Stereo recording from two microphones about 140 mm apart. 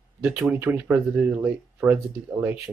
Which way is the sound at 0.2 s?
10° right (ahead or behind).